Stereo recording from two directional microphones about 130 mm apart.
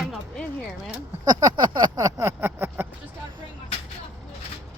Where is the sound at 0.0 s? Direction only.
5° left (ahead or behind).